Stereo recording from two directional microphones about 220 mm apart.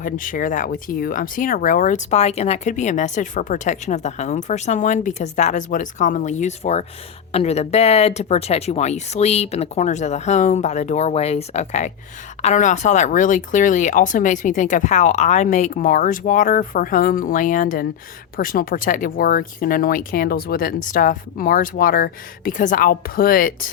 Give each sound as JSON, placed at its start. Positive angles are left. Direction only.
{"t": 0.0, "sound": "speech", "side_deg": 40}